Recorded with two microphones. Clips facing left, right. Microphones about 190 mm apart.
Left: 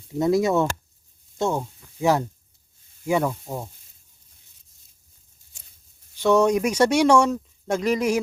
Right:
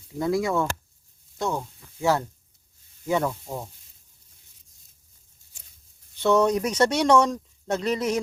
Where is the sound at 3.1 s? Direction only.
10° left (ahead or behind).